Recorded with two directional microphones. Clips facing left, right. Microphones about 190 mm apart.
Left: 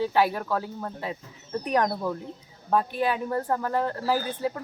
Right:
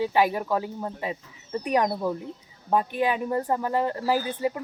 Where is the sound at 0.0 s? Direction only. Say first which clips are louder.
Right 1 dB; 15° right (ahead or behind).